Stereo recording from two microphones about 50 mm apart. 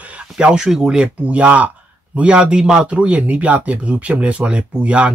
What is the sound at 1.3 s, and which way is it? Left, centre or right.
Speech, right.